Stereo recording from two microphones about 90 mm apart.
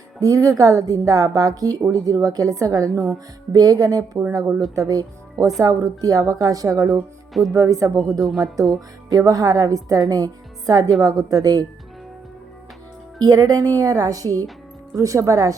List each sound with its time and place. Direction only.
0.2 s a woman's voice: 40° right (ahead or behind)
8.2 s speech: centre (ahead or behind)
9.1 s a woman's voice: 40° right (ahead or behind)
13.2 s a woman's voice: 45° right (ahead or behind)